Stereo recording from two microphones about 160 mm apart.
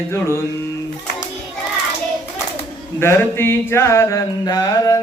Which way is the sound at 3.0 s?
15° left (ahead or behind).